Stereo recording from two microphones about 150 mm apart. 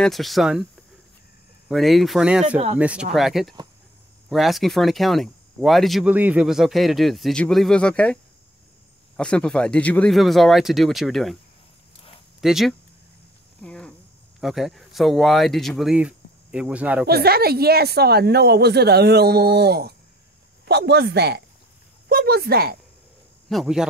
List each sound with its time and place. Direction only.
0.0 s speech: centre (ahead or behind)
1.7 s speech: centre (ahead or behind)
12.4 s speech: centre (ahead or behind)
13.6 s cricket: 5° left (ahead or behind)
14.4 s speech: centre (ahead or behind)
17.0 s speech: 90° right
23.5 s speech: centre (ahead or behind)